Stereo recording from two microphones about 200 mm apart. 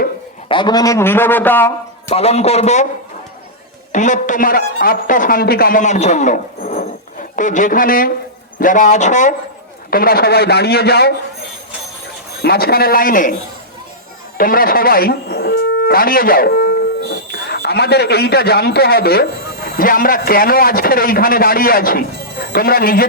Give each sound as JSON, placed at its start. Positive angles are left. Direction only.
{"t": 0.4, "sound": "a man's voice", "side_deg": 25}
{"t": 2.0, "sound": "a man's voice", "side_deg": 30}
{"t": 3.9, "sound": "a man's voice", "side_deg": 40}
{"t": 9.9, "sound": "a man's voice", "side_deg": 50}
{"t": 12.4, "sound": "a man's voice", "side_deg": 50}
{"t": 14.3, "sound": "a man's voice", "side_deg": 45}